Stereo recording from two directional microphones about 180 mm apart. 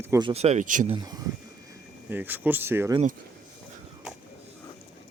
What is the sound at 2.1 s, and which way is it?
Speech, 10° right (ahead or behind).